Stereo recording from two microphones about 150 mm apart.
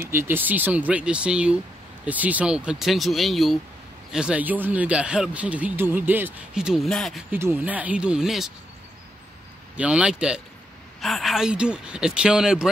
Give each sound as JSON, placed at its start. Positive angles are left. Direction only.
{"t": 0.1, "sound": "speech", "side_deg": -15}
{"t": 7.2, "sound": "speech", "side_deg": -15}
{"t": 9.8, "sound": "speech", "side_deg": -10}